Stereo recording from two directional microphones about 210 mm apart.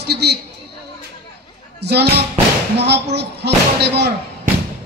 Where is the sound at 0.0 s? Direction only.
50° right (ahead or behind).